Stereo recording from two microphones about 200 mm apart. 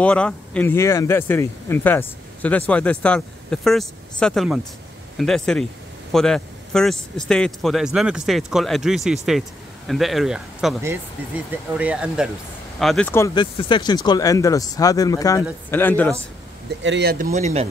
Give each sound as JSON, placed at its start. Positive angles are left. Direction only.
{"t": 0.0, "sound": "speech", "side_deg": 5}
{"t": 11.8, "sound": "speech", "side_deg": -5}
{"t": 16.8, "sound": "speech", "side_deg": -60}
{"t": 17.3, "sound": "speech", "side_deg": -35}